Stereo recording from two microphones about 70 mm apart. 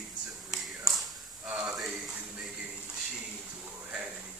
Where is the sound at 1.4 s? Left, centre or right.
Centre.